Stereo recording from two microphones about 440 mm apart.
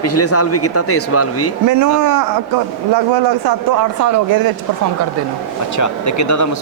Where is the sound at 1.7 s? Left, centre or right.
Right.